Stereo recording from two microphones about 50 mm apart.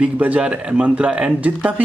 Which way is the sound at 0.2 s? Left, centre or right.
Right.